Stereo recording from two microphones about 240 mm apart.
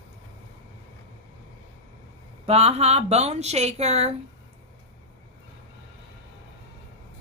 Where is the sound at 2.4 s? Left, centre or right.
Right.